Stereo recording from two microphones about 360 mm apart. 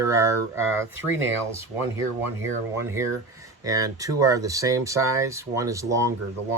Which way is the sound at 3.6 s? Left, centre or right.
Centre.